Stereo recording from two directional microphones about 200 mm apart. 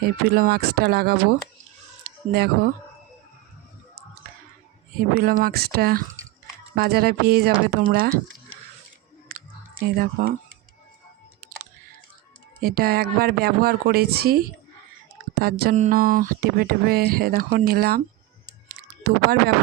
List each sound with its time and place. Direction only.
0.0 s speech: 50° right (ahead or behind)
2.0 s chicken: 50° right (ahead or behind)
5.1 s speech: 50° right (ahead or behind)
9.3 s clicking: 50° right (ahead or behind)
9.8 s speech: 45° right (ahead or behind)
12.6 s speech: 50° right (ahead or behind)
18.8 s a sound: 50° right (ahead or behind)